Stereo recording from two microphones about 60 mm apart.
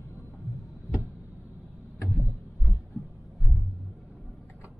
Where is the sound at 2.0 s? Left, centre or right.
Centre.